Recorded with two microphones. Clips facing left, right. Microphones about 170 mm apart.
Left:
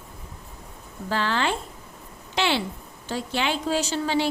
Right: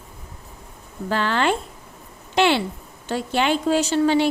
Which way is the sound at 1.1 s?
55° right (ahead or behind).